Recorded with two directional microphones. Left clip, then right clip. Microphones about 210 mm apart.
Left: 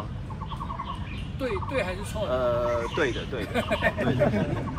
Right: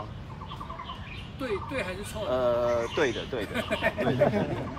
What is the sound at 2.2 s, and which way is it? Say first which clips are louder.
Speech: even; 50° right (ahead or behind).